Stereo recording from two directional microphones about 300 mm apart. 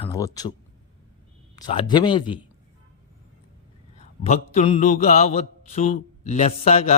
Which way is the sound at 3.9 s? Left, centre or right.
Left.